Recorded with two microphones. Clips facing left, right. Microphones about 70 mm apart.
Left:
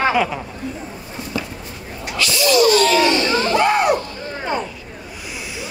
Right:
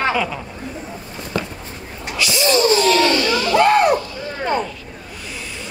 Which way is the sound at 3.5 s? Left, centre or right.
Right.